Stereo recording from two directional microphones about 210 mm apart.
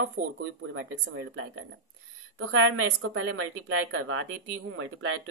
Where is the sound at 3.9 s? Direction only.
65° right (ahead or behind).